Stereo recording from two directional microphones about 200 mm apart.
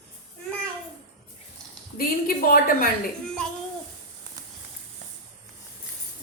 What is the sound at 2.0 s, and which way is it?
Speech, 45° left (ahead or behind).